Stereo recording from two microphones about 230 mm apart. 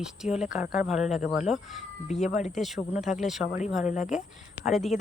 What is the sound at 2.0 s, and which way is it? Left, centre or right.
Speech, left.